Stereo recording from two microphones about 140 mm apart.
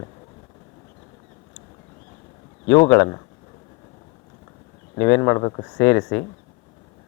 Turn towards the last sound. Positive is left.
turn(degrees=20)  # may be behind; listen again after turning